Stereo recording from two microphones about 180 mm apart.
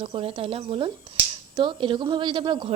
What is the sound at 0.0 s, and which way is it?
A woman's voice, 30° right (ahead or behind).